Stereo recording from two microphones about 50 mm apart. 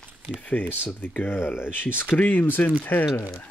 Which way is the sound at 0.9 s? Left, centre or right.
Left.